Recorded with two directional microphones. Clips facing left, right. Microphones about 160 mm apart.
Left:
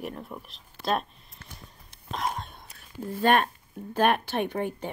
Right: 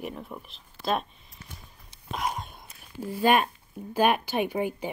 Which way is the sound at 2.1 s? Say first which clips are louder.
Even; 5° right (ahead or behind).